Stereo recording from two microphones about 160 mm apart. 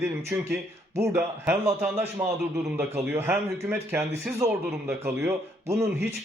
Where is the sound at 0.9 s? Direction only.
15° right (ahead or behind).